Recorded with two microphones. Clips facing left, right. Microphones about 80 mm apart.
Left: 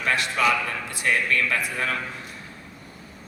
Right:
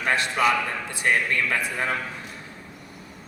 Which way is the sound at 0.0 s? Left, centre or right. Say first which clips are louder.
Right 1 dB; right.